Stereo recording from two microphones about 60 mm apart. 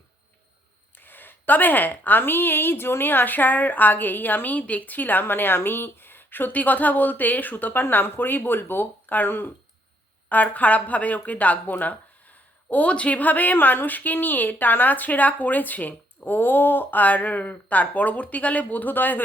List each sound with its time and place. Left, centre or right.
0.9 s a woman's voice: left